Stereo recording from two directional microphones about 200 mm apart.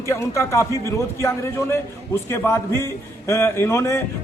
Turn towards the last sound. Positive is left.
turn(degrees=15)  # may be behind; listen again after turning